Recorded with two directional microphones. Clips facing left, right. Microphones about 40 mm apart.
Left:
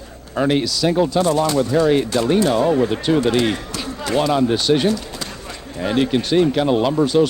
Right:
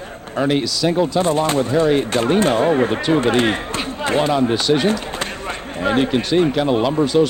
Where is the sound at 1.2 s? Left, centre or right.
Right.